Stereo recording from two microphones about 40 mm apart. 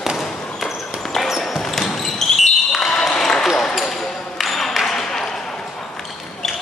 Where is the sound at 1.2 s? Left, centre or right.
Centre.